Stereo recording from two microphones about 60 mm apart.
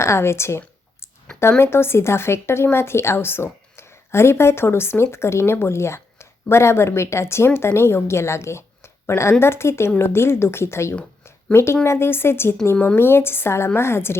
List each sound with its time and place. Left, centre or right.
0.0 s speech: left